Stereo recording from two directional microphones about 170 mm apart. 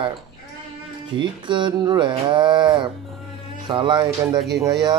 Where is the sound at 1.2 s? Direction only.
30° right (ahead or behind).